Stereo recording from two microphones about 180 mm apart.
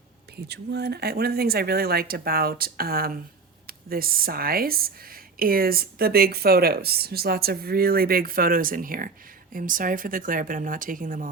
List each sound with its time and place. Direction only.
0.4 s speech: 65° right (ahead or behind); by 11.3 s 50° right (ahead or behind)